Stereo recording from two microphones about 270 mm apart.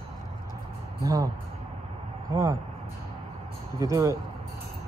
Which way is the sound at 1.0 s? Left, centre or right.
Centre.